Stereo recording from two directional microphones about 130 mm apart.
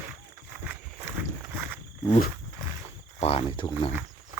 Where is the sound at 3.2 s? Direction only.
50° left (ahead or behind).